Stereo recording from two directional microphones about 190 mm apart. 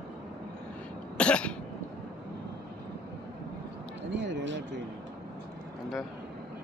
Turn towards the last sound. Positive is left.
turn(degrees=-70)  # may be behind; listen again after turning